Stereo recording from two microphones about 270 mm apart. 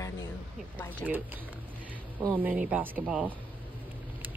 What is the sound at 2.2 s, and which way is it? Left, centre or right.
Speech, centre.